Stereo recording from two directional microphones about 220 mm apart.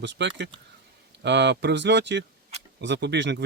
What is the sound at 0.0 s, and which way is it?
Speech, 55° right (ahead or behind).